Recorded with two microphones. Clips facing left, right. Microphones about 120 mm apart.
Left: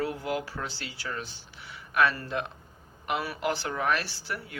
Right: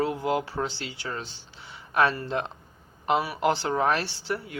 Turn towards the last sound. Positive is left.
turn(degrees=-25)  # may be behind; listen again after turning